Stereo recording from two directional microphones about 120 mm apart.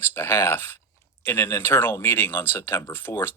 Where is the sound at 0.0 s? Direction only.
20° left (ahead or behind).